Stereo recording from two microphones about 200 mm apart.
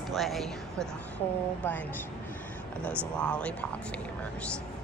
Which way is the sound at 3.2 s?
5° left (ahead or behind).